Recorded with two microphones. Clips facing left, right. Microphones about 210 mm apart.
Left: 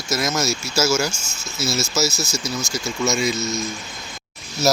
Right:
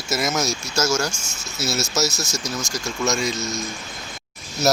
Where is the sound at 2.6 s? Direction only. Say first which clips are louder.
Left 2 dB; 15° right (ahead or behind).